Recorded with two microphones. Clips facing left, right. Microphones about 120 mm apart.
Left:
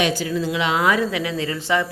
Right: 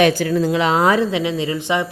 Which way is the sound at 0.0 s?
50° right (ahead or behind).